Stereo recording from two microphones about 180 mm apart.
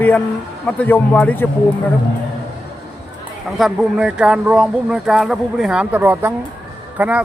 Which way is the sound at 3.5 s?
Centre (ahead or behind).